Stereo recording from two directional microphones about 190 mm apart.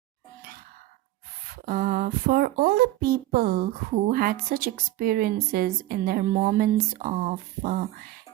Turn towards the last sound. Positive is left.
turn(degrees=-40)  # may be behind; listen again after turning